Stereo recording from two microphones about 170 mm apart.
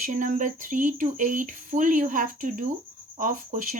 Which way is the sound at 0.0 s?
50° right (ahead or behind).